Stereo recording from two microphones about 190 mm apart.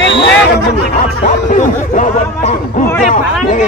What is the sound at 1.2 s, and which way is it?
Speech, 40° left (ahead or behind).